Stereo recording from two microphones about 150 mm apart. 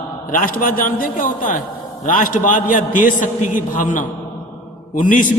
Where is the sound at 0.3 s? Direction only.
65° left (ahead or behind).